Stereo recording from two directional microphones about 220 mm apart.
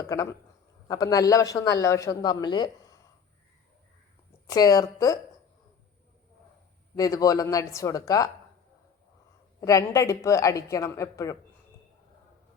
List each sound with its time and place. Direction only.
0.1 s a man's voice: 15° left (ahead or behind)
4.4 s a man's voice: 15° left (ahead or behind)
6.9 s a man's voice: 15° left (ahead or behind)
9.6 s a man's voice: 15° left (ahead or behind)